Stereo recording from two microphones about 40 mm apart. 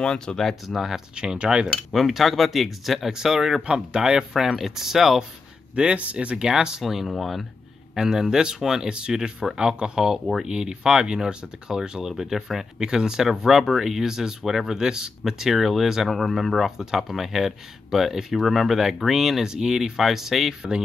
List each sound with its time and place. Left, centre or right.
0.0 s speech: left
0.4 s speech: centre
0.7 s speech: centre
1.1 s speech: right
1.9 s speech: centre
3.1 s speech: centre
3.6 s speech: right
5.8 s speech: right
6.8 s speech: centre
7.9 s speech: centre
8.8 s speech: right
12.0 s speech: centre